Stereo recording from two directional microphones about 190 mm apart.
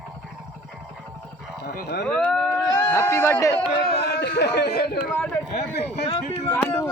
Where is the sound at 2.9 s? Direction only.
15° left (ahead or behind).